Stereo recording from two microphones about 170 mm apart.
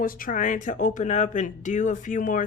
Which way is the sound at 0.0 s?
55° left (ahead or behind).